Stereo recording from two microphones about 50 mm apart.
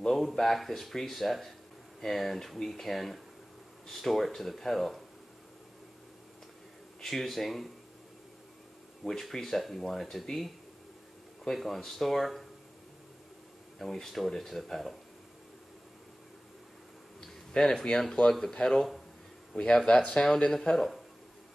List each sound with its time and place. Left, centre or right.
0.1 s speech: centre
7.0 s speech: centre
9.0 s speech: centre
13.7 s speech: centre
17.5 s speech: centre